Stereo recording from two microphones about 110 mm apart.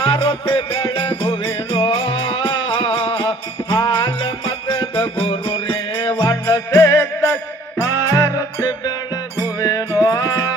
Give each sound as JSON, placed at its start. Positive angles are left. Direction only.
{"t": 0.0, "sound": "music", "side_deg": 50}